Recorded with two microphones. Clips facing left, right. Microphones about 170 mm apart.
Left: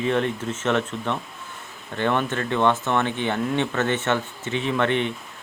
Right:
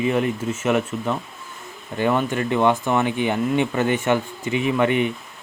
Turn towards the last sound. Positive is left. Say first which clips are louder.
# right 3 dB
turn(degrees=-10)  # may be behind; listen again after turning